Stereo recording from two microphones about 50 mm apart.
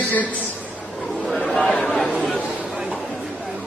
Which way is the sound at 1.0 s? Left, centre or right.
Centre.